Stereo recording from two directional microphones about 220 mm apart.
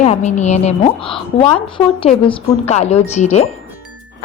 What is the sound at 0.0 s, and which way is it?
A woman's voice, 30° left (ahead or behind).